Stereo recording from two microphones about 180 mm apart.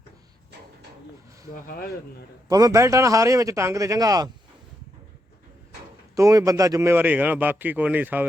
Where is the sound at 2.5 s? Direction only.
20° right (ahead or behind).